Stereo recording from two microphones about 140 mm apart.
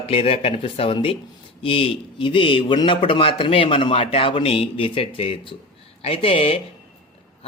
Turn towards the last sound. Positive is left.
turn(degrees=40)  # may be behind; listen again after turning